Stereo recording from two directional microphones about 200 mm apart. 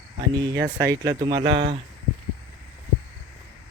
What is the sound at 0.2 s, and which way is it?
Speech, 20° right (ahead or behind).